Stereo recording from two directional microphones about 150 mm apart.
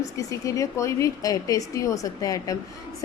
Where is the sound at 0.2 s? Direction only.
20° left (ahead or behind).